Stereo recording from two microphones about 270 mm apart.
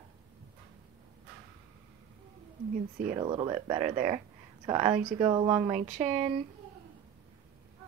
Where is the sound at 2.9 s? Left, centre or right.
Right.